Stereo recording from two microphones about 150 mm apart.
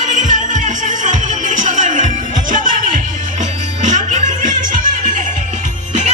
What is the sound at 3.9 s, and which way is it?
Music, 55° right (ahead or behind).